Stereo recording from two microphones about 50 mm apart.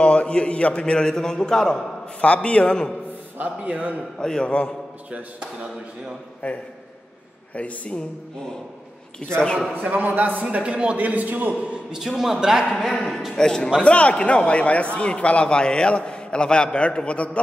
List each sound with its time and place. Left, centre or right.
0.0 s a man's voice: left
2.2 s a man's voice: left
3.3 s speech: right
4.2 s a man's voice: centre
5.4 s speech: right
6.4 s a man's voice: left
9.2 s a man's voice: centre
9.8 s speech: right
10.4 s speech: right
11.0 s speech: right
11.9 s a man's voice: centre
12.9 s a man's voice: centre